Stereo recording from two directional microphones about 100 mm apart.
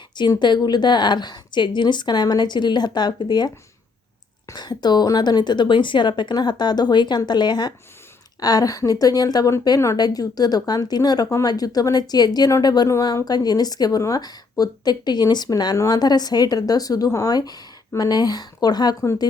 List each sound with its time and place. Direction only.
0.3 s a woman's voice: 50° left (ahead or behind)